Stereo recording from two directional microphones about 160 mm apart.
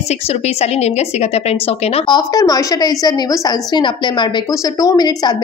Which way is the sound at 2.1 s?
25° left (ahead or behind).